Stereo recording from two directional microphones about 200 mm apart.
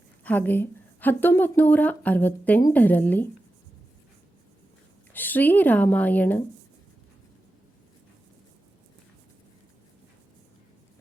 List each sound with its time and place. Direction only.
0.3 s a woman's voice: 10° left (ahead or behind)
5.1 s a woman's voice: 10° left (ahead or behind)